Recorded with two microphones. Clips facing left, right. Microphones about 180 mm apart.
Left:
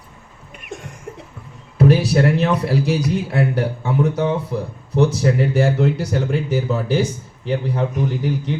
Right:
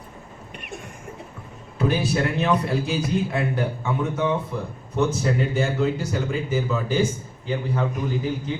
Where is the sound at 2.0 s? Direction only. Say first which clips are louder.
Left 5 dB; 75° left (ahead or behind).